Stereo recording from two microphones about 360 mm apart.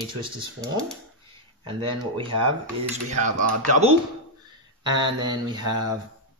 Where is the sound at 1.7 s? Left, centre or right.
Centre.